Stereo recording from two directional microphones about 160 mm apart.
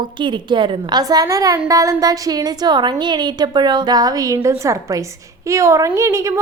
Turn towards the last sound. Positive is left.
turn(degrees=-20)  # may be behind; listen again after turning